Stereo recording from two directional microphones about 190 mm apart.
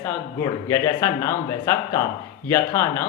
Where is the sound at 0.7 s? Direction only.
15° left (ahead or behind).